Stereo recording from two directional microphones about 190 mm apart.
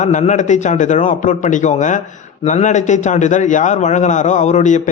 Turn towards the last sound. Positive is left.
turn(degrees=40)  # may be behind; listen again after turning